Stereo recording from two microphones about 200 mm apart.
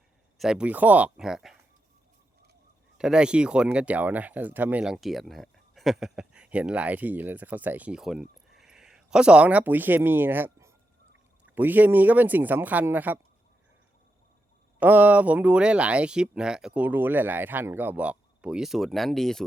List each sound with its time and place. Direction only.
0.3 s speech: 5° right (ahead or behind)
3.0 s speech: 5° right (ahead or behind)
14.8 s speech: 10° right (ahead or behind)